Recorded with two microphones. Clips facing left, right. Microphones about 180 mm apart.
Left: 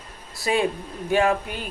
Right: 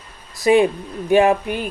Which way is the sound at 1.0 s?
15° right (ahead or behind).